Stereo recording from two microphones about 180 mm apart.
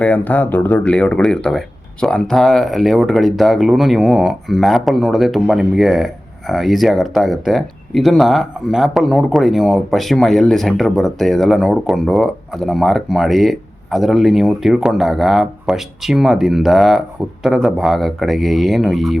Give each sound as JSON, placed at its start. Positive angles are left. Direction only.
{"t": 0.0, "sound": "speech", "side_deg": 10}